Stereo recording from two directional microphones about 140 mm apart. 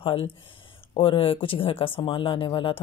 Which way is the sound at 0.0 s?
45° left (ahead or behind).